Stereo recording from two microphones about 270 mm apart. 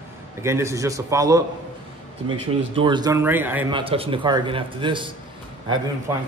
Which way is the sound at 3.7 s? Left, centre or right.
Centre.